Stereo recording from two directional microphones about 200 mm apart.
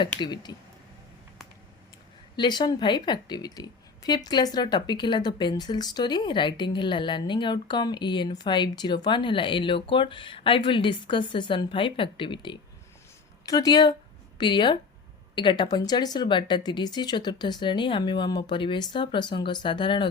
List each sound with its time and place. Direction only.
0.0 s a woman's voice: 20° left (ahead or behind)
2.3 s a woman's voice: 20° left (ahead or behind)